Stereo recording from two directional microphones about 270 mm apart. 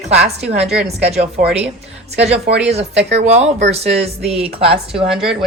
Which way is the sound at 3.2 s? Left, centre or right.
Right.